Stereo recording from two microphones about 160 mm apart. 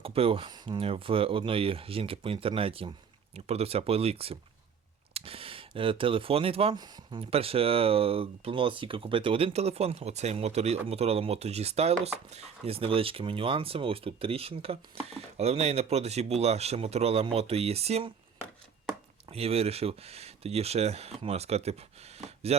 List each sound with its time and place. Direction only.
0.0 s speech: 35° right (ahead or behind)
19.3 s speech: 40° right (ahead or behind)